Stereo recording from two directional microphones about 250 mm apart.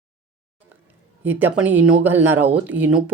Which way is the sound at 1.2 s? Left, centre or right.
Centre.